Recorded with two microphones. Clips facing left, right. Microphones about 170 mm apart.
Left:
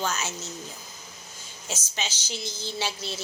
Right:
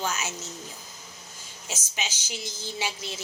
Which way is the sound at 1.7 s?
10° right (ahead or behind).